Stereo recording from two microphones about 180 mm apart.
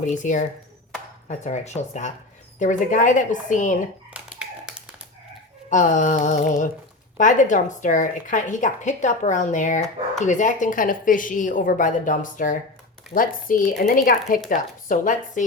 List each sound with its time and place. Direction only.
0.0 s a woman's voice: 45° left (ahead or behind)
4.1 s tap: 5° right (ahead or behind)
5.7 s a woman's voice: 45° left (ahead or behind)